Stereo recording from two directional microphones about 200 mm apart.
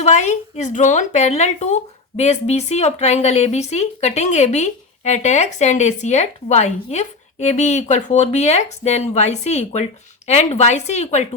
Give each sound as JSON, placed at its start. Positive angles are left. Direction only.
{"t": 0.0, "sound": "a woman's voice", "side_deg": 35}